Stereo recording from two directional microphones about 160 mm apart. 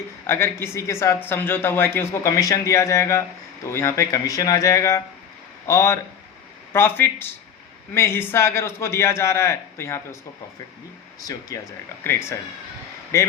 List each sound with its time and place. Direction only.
0.3 s a man's voice: 15° left (ahead or behind)
11.2 s a man's voice: 20° left (ahead or behind)